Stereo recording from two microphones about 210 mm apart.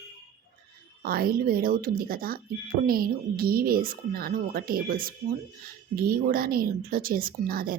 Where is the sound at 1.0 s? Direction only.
45° right (ahead or behind).